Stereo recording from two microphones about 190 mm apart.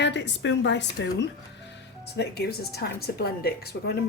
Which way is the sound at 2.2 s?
60° left (ahead or behind).